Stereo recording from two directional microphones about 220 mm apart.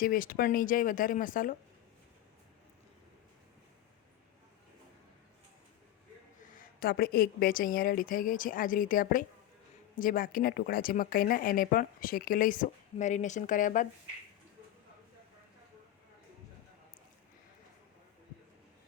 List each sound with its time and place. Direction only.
0.0 s speech: 40° left (ahead or behind)
6.5 s speech: 40° left (ahead or behind)